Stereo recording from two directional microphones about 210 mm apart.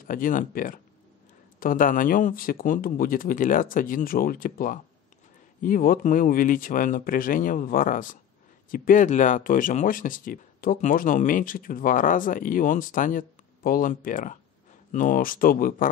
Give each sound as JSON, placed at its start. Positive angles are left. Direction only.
{"t": 0.0, "sound": "speech", "side_deg": 40}